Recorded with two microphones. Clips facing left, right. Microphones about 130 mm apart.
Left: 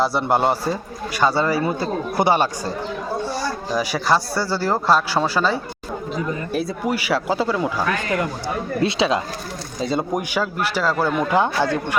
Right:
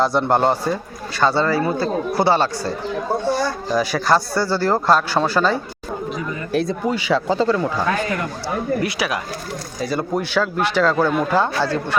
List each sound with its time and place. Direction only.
0.0 s a man's voice: 5° left (ahead or behind)
3.8 s a man's voice: 10° left (ahead or behind)
6.5 s a man's voice: 5° left (ahead or behind)
8.8 s a man's voice: 25° left (ahead or behind)